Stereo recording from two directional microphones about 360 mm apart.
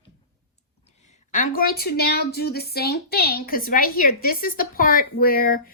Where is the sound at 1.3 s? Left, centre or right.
Left.